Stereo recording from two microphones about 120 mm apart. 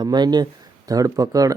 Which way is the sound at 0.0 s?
35° right (ahead or behind).